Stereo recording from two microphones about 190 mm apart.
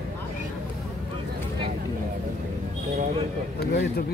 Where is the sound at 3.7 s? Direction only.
60° left (ahead or behind).